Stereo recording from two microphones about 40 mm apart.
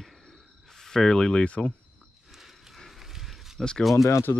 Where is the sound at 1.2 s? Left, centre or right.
Left.